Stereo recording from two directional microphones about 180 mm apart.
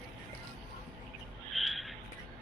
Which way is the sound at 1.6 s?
Centre (ahead or behind).